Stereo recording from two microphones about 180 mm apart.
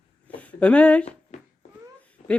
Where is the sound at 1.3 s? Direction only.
40° left (ahead or behind).